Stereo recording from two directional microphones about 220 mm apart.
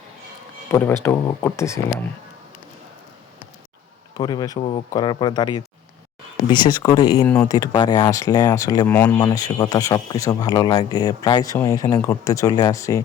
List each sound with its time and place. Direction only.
0.7 s a man's voice: 10° left (ahead or behind)
4.2 s a man's voice: 15° left (ahead or behind)